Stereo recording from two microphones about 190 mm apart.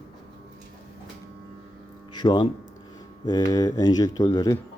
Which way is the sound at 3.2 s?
20° left (ahead or behind).